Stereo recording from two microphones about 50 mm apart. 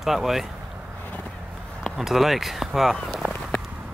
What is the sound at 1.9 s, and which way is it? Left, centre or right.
Speech, centre.